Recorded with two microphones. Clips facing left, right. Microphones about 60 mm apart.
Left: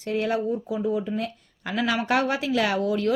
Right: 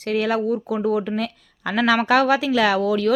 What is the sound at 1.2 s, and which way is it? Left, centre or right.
Speech, right.